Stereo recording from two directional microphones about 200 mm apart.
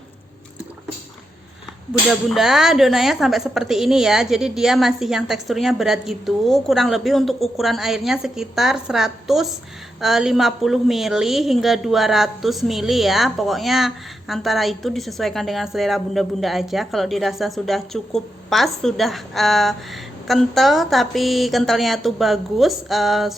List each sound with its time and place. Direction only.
2.0 s a woman's voice: centre (ahead or behind)